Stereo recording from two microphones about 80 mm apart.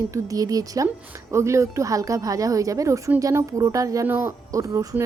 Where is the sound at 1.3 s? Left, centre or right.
Right.